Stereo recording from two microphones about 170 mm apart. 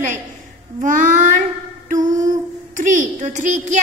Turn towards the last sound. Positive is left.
turn(degrees=-45)  # may be behind; listen again after turning